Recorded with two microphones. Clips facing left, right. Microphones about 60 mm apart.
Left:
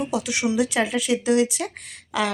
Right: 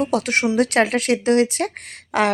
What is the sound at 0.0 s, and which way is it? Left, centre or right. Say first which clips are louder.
Speech: right 5 dB; right.